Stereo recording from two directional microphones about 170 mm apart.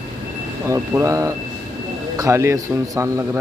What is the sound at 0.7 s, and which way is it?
A man's voice, 20° right (ahead or behind).